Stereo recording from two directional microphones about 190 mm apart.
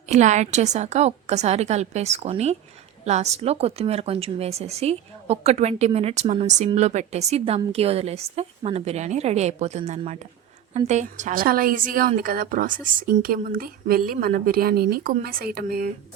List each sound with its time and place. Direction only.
0.1 s a woman's voice: 40° right (ahead or behind); by 15.9 s 55° right (ahead or behind)